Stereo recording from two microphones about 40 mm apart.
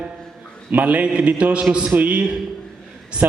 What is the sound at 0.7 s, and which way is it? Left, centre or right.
Speech, right.